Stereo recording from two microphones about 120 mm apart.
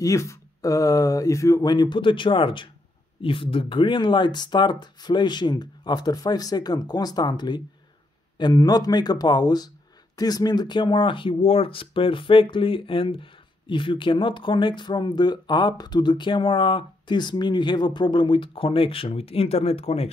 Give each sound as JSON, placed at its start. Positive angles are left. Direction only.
{"t": 0.0, "sound": "speech", "side_deg": 25}